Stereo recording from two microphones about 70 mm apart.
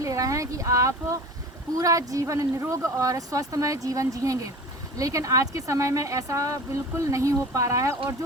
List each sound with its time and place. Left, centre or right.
0.0 s speech: right